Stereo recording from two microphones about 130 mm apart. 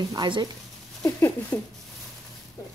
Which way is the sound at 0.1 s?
35° right (ahead or behind).